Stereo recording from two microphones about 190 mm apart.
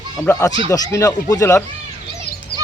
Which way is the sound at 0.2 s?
15° left (ahead or behind).